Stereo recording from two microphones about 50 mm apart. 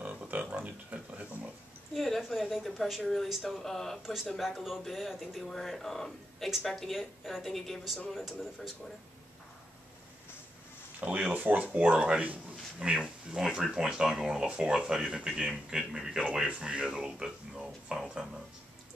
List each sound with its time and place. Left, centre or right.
0.0 s a sound: right
2.0 s speech: centre
4.0 s speech: centre
11.0 s speech: right; by 16.4 s centre
16.4 s speech: right
16.9 s speech: centre